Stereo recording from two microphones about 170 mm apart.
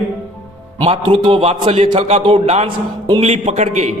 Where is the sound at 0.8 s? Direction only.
30° right (ahead or behind).